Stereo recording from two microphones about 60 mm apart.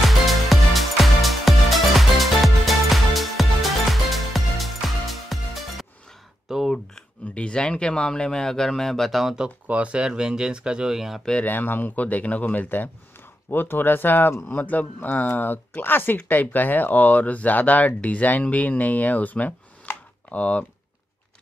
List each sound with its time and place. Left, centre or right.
0.0 s music: centre
6.5 s a sound: centre
7.3 s speech: centre
9.7 s speech: right; by 11.2 s centre
11.4 s speech: left